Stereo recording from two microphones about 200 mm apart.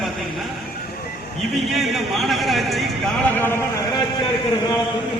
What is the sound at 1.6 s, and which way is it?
A man's voice, centre (ahead or behind).